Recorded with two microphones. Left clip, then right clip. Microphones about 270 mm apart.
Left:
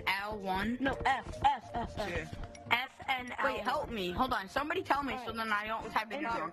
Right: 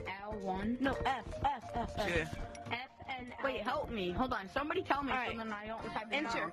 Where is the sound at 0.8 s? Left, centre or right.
Centre.